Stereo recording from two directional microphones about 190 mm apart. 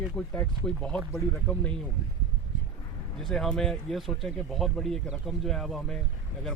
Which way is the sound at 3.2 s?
Centre (ahead or behind).